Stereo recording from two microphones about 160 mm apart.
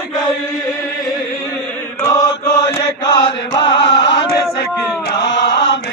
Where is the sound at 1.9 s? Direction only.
20° left (ahead or behind).